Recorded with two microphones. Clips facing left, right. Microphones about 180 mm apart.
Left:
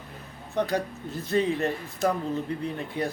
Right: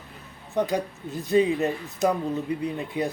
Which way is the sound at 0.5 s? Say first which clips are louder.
Right 2 dB; 15° right (ahead or behind).